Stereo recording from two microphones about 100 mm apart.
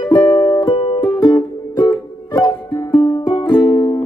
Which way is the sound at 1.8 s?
35° left (ahead or behind).